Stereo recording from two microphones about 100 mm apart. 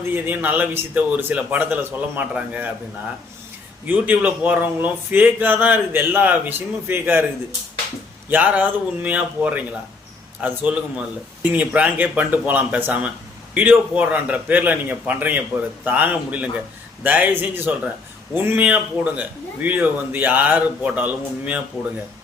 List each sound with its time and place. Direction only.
0.0 s a man's voice: 20° right (ahead or behind)
3.8 s speech: 20° right (ahead or behind)
8.3 s a man's voice: 15° right (ahead or behind)